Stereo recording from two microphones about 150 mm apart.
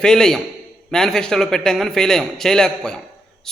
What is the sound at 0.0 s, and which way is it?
A man's voice, 5° left (ahead or behind).